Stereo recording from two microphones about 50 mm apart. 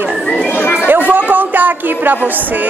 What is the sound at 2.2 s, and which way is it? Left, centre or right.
Speech, right.